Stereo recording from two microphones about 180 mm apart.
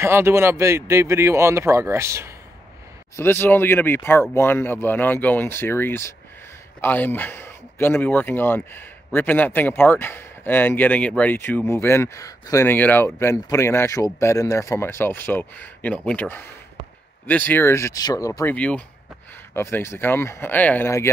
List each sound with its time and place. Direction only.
0.0 s a man's voice: 15° right (ahead or behind)
3.2 s speech: 10° left (ahead or behind)